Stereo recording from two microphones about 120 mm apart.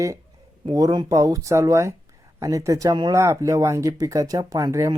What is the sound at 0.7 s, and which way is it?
Speech, 35° right (ahead or behind).